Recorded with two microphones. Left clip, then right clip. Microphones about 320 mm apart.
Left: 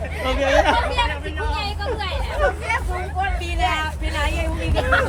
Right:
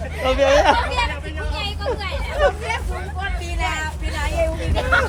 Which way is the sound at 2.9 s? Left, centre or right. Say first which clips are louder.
Left 4 dB; centre.